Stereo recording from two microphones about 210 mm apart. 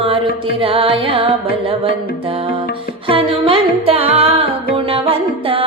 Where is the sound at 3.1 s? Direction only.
25° right (ahead or behind).